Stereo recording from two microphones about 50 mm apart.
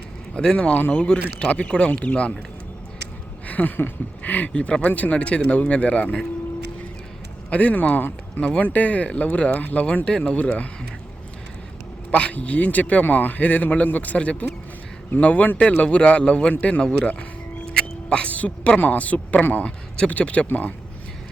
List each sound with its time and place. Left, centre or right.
0.3 s speech: left
3.4 s a sound: left
3.8 s speech: left
7.5 s speech: left
12.1 s speech: left
17.7 s music: centre
18.3 s speech: left